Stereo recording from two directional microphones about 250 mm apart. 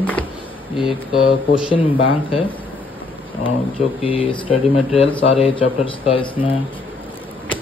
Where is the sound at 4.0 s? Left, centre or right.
Left.